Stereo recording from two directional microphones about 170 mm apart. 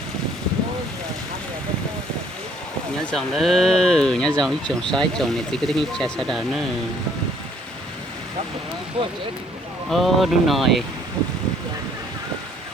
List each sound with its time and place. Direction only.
3.1 s speech: centre (ahead or behind)
9.0 s speech: 30° right (ahead or behind)
9.9 s speech: centre (ahead or behind)